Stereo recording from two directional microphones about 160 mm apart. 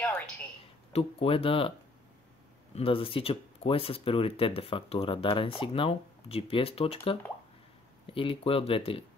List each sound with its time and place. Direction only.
0.9 s speech: 35° left (ahead or behind)
2.7 s speech: 35° left (ahead or behind)